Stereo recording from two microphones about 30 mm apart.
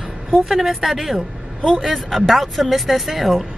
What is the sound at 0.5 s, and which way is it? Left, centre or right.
Speech, centre.